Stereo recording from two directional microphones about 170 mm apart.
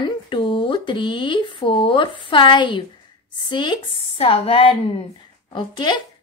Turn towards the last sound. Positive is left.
turn(degrees=25)  # may be behind; listen again after turning